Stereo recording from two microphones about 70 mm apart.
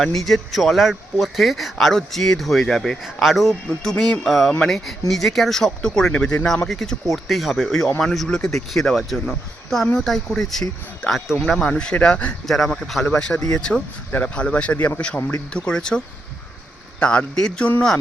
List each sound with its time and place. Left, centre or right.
0.0 s speech: centre
11.0 s speech: centre
12.5 s speech: centre